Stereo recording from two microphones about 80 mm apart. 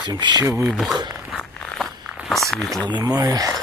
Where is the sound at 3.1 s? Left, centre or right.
Right.